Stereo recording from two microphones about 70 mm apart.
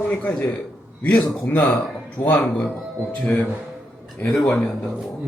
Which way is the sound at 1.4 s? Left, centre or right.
Left.